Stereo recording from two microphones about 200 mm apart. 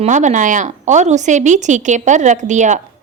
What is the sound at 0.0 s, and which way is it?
A woman's voice, 35° right (ahead or behind).